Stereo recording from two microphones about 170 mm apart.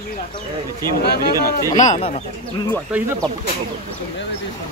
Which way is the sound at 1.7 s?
45° left (ahead or behind).